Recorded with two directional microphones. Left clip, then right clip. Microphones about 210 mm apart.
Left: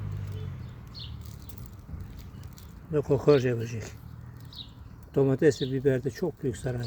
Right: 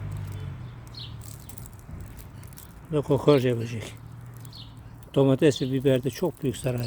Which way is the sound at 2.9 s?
10° right (ahead or behind).